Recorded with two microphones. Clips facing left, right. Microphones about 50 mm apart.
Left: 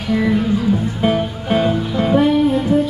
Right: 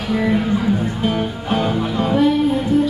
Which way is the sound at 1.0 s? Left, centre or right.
Centre.